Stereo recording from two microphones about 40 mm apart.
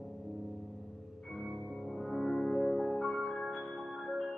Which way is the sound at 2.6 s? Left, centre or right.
Centre.